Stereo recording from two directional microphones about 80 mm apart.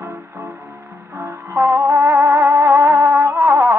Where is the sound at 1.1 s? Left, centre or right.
Right.